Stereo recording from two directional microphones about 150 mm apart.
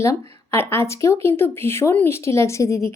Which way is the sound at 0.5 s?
15° left (ahead or behind).